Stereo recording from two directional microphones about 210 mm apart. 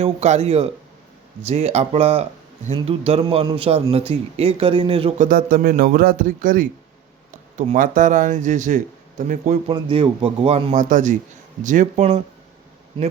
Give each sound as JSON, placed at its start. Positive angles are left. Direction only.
{"t": 0.0, "sound": "a man's voice", "side_deg": -30}
{"t": 9.7, "sound": "a man's voice", "side_deg": -25}